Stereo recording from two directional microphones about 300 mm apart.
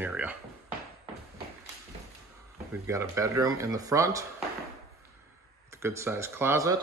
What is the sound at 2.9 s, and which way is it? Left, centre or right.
Speech, centre.